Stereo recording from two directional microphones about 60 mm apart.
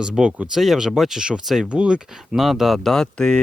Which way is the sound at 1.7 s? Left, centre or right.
Centre.